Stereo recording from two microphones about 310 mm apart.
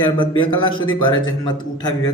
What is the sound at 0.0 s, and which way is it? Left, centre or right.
A man's voice, centre.